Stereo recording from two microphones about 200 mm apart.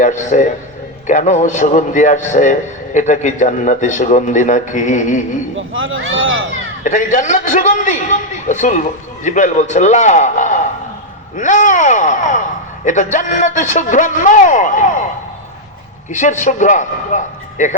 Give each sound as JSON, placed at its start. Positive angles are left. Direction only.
{"t": 0.0, "sound": "a man's voice", "side_deg": 35}
{"t": 5.5, "sound": "speech", "side_deg": -75}
{"t": 6.8, "sound": "a man's voice", "side_deg": 40}
{"t": 16.1, "sound": "a man's voice", "side_deg": 40}